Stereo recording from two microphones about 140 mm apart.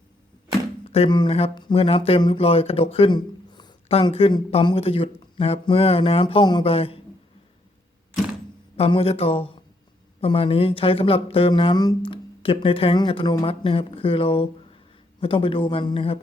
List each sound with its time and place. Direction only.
0.9 s speech: 45° left (ahead or behind)
3.9 s speech: 45° left (ahead or behind)
6.7 s speech: 45° left (ahead or behind)
8.7 s speech: 45° left (ahead or behind)